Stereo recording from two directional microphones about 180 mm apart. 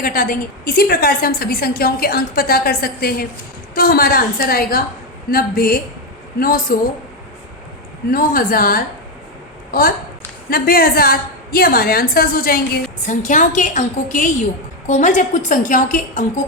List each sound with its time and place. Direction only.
0.0 s a woman's voice: 50° left (ahead or behind)
8.1 s a woman's voice: 55° left (ahead or behind)